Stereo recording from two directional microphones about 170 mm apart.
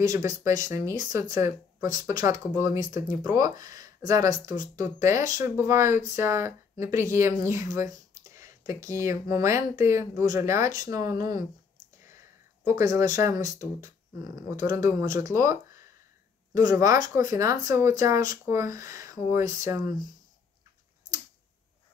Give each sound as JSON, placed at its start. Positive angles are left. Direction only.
{"t": 0.0, "sound": "speech", "side_deg": -20}
{"t": 12.6, "sound": "speech", "side_deg": -20}